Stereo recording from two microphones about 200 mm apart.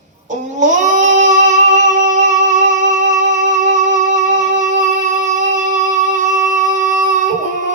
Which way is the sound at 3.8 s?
40° right (ahead or behind).